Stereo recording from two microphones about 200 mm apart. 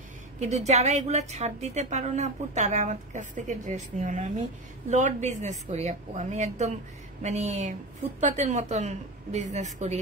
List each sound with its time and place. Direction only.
0.4 s a woman's voice: 35° right (ahead or behind)